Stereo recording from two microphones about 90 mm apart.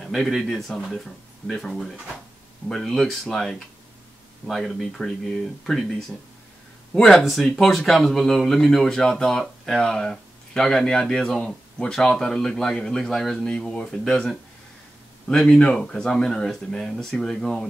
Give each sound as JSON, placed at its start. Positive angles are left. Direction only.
{"t": 0.0, "sound": "speech", "side_deg": 0}